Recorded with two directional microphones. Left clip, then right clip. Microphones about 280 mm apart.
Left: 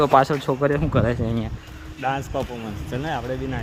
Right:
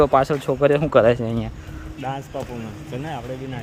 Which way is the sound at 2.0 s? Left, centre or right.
Left.